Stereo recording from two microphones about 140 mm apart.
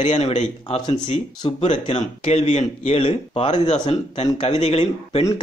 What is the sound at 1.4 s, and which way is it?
Speech, 40° left (ahead or behind).